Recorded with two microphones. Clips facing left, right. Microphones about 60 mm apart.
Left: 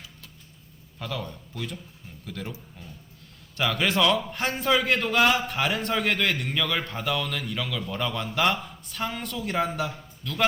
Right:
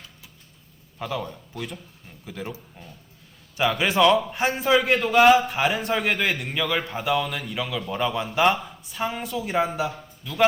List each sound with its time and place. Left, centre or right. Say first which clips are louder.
0.9 s a man's voice: right 4 dB; centre
3.7 s a man's voice: right 4 dB; centre